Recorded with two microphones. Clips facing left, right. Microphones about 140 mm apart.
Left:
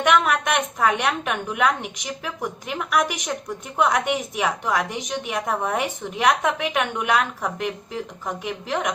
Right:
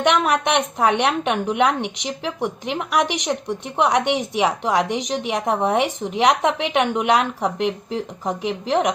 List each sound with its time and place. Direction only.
0.0 s a woman's voice: 30° right (ahead or behind)